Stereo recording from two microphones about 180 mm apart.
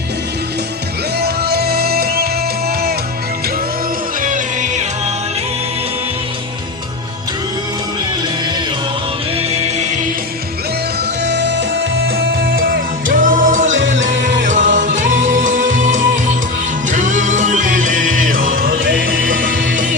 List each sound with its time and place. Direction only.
1.2 s music: 60° right (ahead or behind)
4.2 s music: 45° right (ahead or behind)
11.3 s music: 75° right (ahead or behind)
12.1 s music: 55° right (ahead or behind)